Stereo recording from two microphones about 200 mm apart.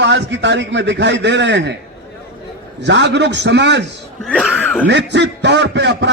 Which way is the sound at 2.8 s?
60° right (ahead or behind).